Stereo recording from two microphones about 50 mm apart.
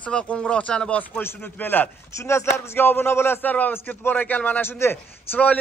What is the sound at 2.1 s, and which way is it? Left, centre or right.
A man's voice, left.